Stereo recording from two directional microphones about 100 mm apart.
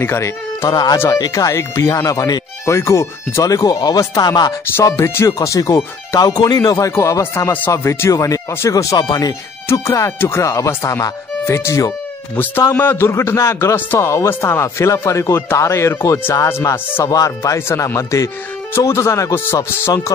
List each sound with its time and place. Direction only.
0.0 s speech: 25° left (ahead or behind)
0.7 s speech: 40° left (ahead or behind)
0.9 s a man's voice: 25° left (ahead or behind); by 4.6 s 40° left (ahead or behind)
4.8 s a man's voice: 30° left (ahead or behind)